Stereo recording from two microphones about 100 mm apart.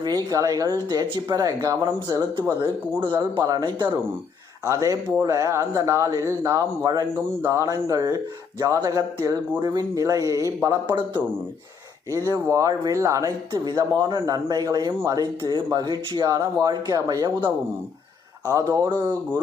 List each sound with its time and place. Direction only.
0.3 s speech: 35° right (ahead or behind)
10.8 s speech: 50° right (ahead or behind)
12.1 s speech: 30° right (ahead or behind); by 17.5 s 45° right (ahead or behind)
18.4 s speech: 35° right (ahead or behind)